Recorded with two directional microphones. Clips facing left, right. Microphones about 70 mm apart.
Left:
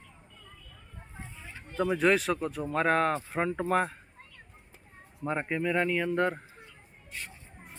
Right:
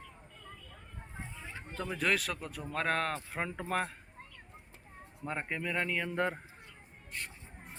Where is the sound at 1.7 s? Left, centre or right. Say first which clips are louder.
Left 8 dB; centre.